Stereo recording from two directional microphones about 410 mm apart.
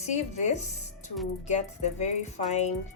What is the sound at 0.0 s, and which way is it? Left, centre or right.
Speech, centre.